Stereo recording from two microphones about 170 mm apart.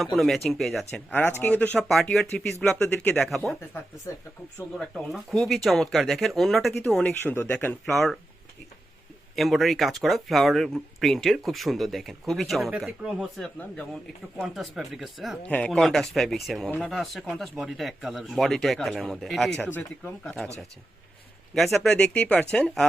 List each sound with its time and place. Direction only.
0.0 s speech: centre (ahead or behind)
4.8 s speech: centre (ahead or behind)
9.3 s speech: centre (ahead or behind)
21.5 s speech: centre (ahead or behind)